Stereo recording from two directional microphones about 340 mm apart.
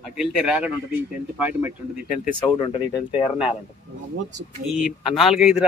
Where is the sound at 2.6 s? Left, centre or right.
Centre.